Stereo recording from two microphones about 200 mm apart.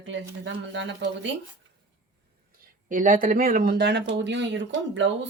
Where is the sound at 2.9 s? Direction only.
40° right (ahead or behind).